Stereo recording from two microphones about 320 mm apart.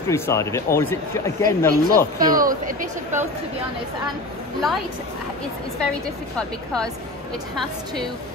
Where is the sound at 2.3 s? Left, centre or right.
Right.